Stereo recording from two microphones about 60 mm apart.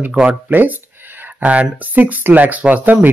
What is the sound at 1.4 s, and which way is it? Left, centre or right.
Speech, right.